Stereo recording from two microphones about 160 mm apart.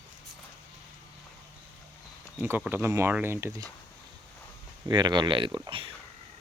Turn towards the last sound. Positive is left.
turn(degrees=-30)  # may be behind; listen again after turning